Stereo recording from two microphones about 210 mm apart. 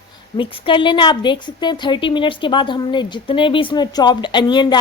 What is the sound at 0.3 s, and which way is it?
A woman's voice, 25° left (ahead or behind).